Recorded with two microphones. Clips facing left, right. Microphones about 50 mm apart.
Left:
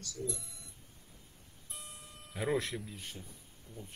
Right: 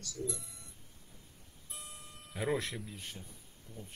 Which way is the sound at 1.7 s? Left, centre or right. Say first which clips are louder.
Even; centre.